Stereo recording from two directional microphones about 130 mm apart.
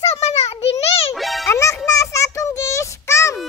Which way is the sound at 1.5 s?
20° left (ahead or behind).